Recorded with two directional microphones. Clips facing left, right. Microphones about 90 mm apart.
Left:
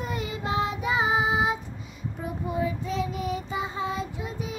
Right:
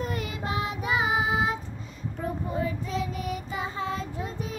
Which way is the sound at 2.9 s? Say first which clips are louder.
Left 2 dB; 25° left (ahead or behind).